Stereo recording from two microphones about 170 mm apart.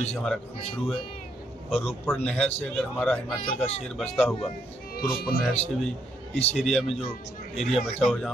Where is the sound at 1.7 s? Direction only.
35° left (ahead or behind).